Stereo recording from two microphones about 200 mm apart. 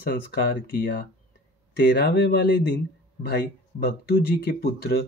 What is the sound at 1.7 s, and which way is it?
Speech, 55° left (ahead or behind).